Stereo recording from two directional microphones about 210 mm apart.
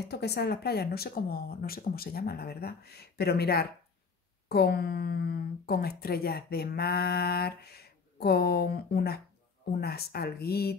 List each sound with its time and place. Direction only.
0.0 s speech: 50° left (ahead or behind)